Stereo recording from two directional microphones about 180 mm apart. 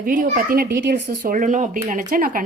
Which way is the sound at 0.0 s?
50° right (ahead or behind).